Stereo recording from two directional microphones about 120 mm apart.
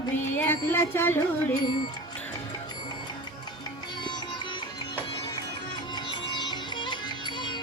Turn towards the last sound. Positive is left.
turn(degrees=40)  # may be behind; listen again after turning